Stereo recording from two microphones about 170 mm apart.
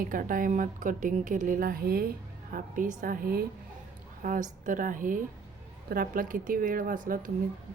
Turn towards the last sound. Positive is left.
turn(degrees=-55)  # may be behind; listen again after turning